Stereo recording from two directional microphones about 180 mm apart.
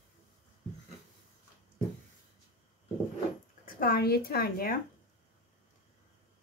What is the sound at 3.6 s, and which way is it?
Speech, 55° left (ahead or behind).